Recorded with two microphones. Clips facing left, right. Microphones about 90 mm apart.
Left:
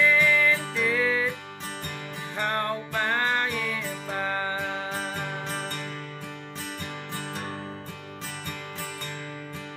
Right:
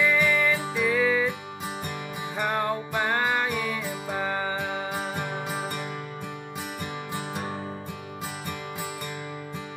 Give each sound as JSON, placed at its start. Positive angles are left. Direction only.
{"t": 0.0, "sound": "music", "side_deg": -10}
{"t": 2.3, "sound": "music", "side_deg": -10}